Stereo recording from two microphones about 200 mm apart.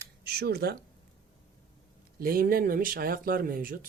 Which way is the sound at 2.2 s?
45° right (ahead or behind).